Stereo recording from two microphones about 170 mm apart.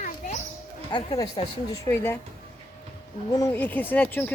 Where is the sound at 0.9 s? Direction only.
25° left (ahead or behind).